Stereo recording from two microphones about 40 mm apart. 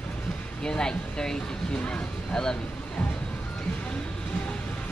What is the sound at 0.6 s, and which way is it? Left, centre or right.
Speech, left.